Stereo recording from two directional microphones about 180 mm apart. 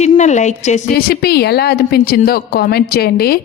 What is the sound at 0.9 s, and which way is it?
A woman's voice, 60° left (ahead or behind).